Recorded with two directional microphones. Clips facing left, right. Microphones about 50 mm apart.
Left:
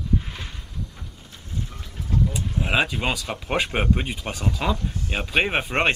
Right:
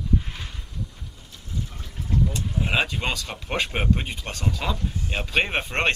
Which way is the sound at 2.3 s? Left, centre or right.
Centre.